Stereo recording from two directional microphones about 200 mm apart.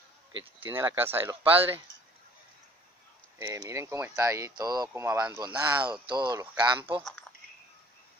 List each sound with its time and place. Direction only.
0.6 s speech: 10° right (ahead or behind)
3.3 s speech: 15° right (ahead or behind)